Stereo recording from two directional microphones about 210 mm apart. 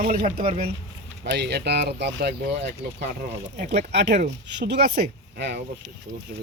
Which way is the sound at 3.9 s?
55° right (ahead or behind).